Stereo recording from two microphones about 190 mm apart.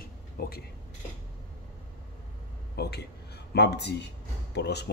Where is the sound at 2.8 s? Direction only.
60° left (ahead or behind).